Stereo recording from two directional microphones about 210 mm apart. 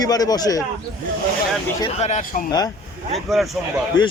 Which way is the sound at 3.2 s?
Centre (ahead or behind).